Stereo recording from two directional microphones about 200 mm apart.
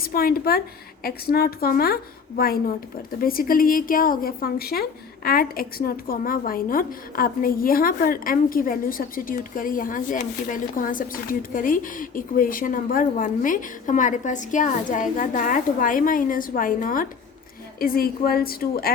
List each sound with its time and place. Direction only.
0.0 s a woman's voice: 45° left (ahead or behind)